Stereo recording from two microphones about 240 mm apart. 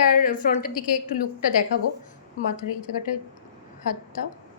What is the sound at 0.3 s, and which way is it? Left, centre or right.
Speech, left.